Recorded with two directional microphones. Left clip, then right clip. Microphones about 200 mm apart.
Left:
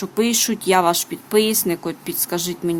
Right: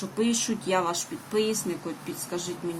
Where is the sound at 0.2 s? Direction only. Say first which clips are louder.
Left 8 dB; 50° left (ahead or behind).